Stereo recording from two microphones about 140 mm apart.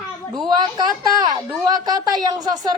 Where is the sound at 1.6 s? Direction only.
30° right (ahead or behind).